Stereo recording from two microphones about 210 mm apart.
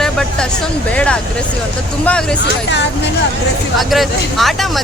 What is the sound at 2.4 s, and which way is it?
Speech, 55° left (ahead or behind).